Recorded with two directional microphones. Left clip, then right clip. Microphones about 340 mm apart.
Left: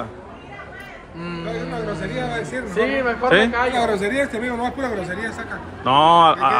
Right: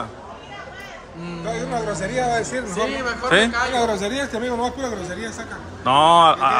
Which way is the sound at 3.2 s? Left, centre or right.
Centre.